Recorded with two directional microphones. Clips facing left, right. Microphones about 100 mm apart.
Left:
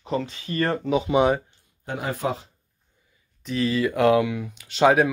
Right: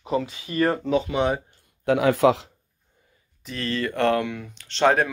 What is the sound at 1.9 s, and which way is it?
Speech, 90° right.